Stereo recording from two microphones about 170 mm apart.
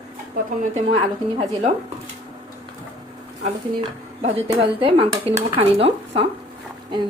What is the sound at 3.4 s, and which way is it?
Speech, 40° right (ahead or behind).